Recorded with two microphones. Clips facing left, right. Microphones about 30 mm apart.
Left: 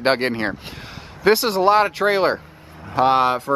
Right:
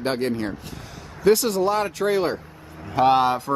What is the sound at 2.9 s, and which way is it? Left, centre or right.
Speech, left.